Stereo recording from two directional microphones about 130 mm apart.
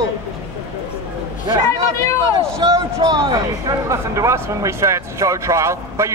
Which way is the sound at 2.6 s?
30° right (ahead or behind).